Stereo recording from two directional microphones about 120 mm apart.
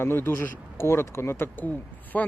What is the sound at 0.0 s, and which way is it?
Speech, 20° left (ahead or behind).